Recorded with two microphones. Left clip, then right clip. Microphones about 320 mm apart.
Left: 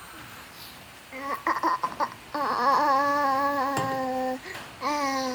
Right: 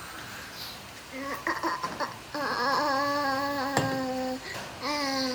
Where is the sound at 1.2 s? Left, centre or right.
Centre.